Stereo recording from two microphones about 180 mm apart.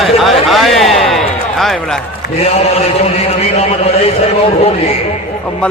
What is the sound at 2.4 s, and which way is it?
A man's voice, 35° left (ahead or behind).